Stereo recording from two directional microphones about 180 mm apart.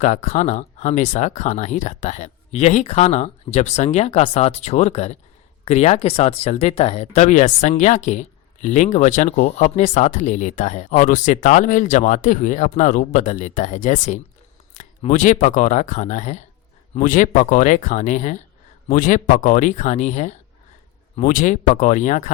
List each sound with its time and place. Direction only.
0.0 s speech: 40° left (ahead or behind)